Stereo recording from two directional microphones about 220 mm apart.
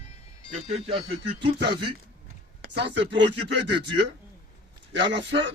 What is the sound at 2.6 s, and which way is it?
Speech, 50° right (ahead or behind).